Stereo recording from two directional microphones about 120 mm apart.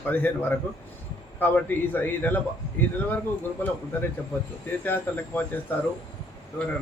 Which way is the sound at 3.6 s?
15° left (ahead or behind).